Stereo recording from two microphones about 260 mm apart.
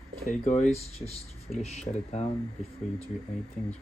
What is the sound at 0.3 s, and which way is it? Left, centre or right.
Speech, left.